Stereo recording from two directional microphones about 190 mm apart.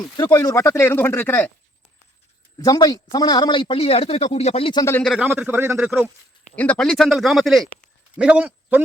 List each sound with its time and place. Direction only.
0.2 s speech: 20° left (ahead or behind)
2.6 s speech: 20° left (ahead or behind)
4.9 s speech: centre (ahead or behind)
5.2 s speech: 10° right (ahead or behind)
6.4 s a man's voice: 5° left (ahead or behind)